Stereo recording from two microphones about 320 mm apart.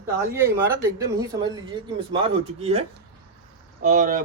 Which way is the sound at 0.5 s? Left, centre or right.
Centre.